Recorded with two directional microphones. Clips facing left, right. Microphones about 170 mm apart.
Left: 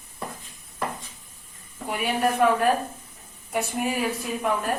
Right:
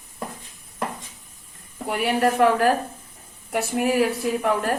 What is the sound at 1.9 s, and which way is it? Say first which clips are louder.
Speech: right 3 dB; 75° right (ahead or behind).